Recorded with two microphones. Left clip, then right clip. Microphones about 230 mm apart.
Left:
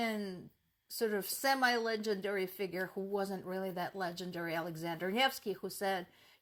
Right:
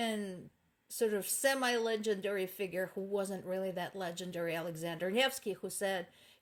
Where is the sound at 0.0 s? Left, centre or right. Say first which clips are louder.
Even; left.